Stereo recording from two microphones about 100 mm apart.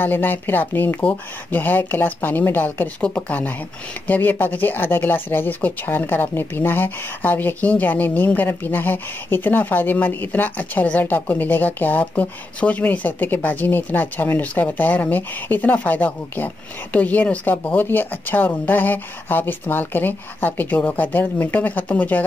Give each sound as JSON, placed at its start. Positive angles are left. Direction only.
{"t": 0.0, "sound": "speech", "side_deg": 20}